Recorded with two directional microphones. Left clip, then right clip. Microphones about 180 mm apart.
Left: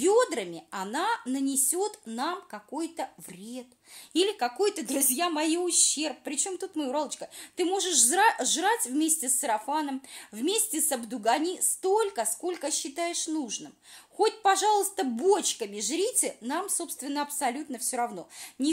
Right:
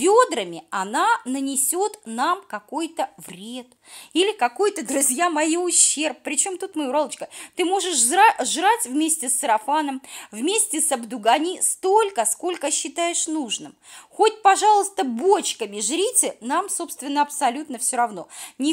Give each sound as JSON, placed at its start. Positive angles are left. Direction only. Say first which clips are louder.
{"t": 0.0, "sound": "a woman's voice", "louder": "right 7 dB", "side_deg": -25}
{"t": 4.1, "sound": "a woman's voice", "louder": "right 7 dB", "side_deg": -20}
{"t": 5.7, "sound": "speech", "louder": "right 5 dB", "side_deg": 20}
{"t": 5.9, "sound": "a woman's voice", "louder": "right 7 dB", "side_deg": -30}
{"t": 14.1, "sound": "a woman's voice", "louder": "right 8 dB", "side_deg": -25}